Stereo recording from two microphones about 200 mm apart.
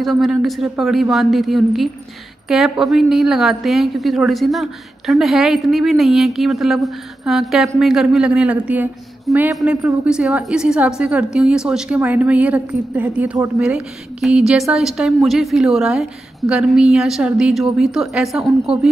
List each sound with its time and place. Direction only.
0.0 s a woman's voice: centre (ahead or behind)